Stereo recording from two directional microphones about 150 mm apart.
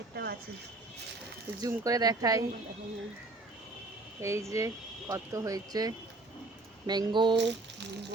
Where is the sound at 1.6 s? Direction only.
25° right (ahead or behind).